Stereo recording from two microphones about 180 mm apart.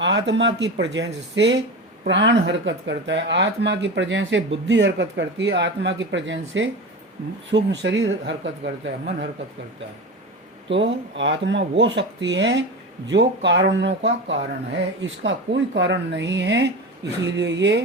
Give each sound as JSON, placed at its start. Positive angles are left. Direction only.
{"t": 0.0, "sound": "speech", "side_deg": -80}
{"t": 7.5, "sound": "speech", "side_deg": -80}
{"t": 10.7, "sound": "speech", "side_deg": -90}